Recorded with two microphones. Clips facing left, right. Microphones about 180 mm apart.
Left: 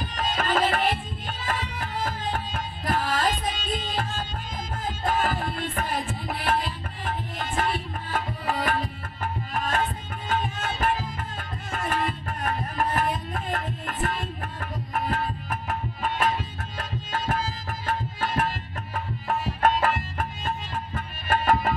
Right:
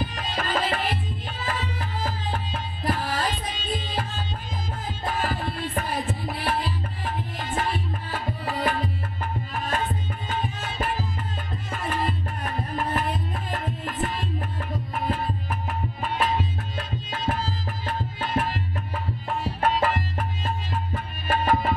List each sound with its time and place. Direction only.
0.1 s music: 50° left (ahead or behind)
0.6 s tabla: 50° left (ahead or behind)
1.5 s music: 50° left (ahead or behind)
3.1 s tabla: 50° left (ahead or behind)
4.8 s music: 45° left (ahead or behind)
20.9 s music: 50° left (ahead or behind)